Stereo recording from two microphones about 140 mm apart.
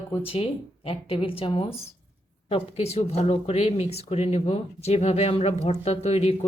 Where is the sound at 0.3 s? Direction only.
40° left (ahead or behind).